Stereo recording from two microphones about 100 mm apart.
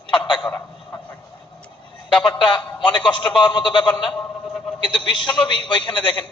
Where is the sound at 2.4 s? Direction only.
50° left (ahead or behind).